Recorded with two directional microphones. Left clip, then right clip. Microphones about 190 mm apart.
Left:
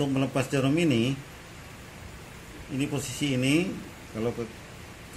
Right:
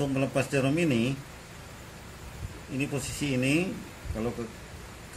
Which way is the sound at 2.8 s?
15° left (ahead or behind).